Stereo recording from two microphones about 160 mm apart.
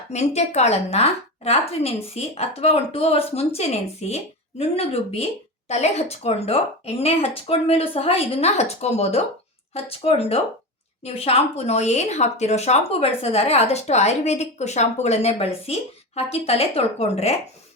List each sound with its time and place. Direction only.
0.1 s a woman's voice: 45° left (ahead or behind)